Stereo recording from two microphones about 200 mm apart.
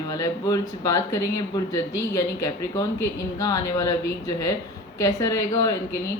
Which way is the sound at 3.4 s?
15° left (ahead or behind).